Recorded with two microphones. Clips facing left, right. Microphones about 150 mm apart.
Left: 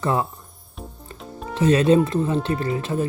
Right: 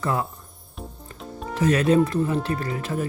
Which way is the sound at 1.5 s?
25° left (ahead or behind).